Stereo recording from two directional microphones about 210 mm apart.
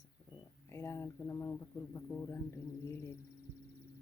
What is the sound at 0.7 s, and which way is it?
Speech, 15° left (ahead or behind).